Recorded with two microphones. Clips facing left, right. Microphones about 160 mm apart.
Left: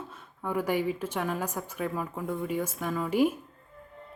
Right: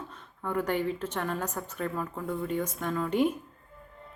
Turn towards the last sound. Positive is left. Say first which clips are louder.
# left 1 dB
turn(degrees=5)  # may be behind; listen again after turning